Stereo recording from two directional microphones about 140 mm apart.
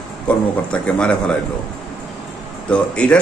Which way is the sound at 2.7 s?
10° left (ahead or behind).